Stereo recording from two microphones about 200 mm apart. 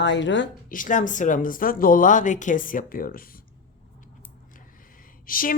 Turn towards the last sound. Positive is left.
turn(degrees=45)  # may be behind; listen again after turning